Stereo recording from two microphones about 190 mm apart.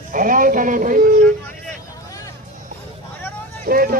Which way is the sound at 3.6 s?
50° right (ahead or behind).